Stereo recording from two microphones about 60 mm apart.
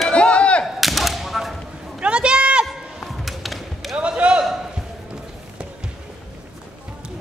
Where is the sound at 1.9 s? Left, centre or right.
Centre.